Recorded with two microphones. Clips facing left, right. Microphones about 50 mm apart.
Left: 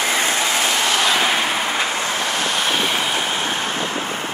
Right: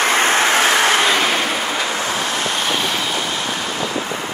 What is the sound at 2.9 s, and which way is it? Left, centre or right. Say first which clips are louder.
Vehicle: left 1 dB; left.